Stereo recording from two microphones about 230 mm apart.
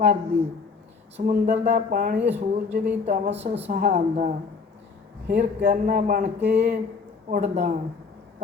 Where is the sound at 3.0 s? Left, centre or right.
Right.